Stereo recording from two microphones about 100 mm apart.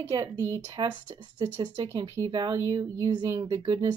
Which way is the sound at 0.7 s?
45° right (ahead or behind).